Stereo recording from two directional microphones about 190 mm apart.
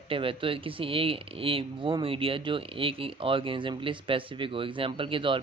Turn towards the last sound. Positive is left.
turn(degrees=-25)  # may be behind; listen again after turning